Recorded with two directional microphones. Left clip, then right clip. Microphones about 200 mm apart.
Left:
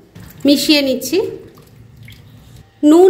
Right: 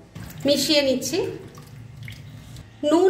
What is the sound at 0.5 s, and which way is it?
Speech, 45° left (ahead or behind).